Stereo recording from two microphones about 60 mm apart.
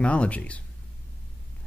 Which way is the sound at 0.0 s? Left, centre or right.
Left.